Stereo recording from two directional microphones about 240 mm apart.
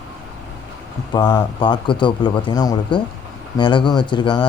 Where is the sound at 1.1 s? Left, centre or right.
Centre.